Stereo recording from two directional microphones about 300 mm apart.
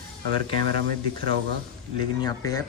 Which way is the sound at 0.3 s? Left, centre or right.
Right.